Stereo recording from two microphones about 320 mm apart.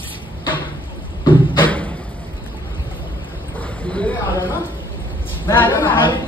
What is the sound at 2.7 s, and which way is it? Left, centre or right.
Vehicle, centre.